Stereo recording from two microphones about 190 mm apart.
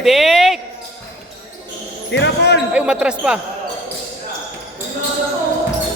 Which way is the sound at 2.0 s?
70° left (ahead or behind).